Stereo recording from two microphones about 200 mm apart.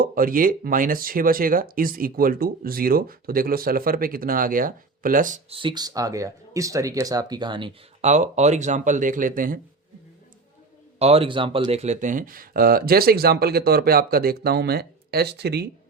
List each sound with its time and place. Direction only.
0.0 s speech: 45° right (ahead or behind)
5.5 s speech: 25° right (ahead or behind)
8.1 s speech: 35° right (ahead or behind)
11.0 s speech: 30° right (ahead or behind); by 15.7 s 55° right (ahead or behind)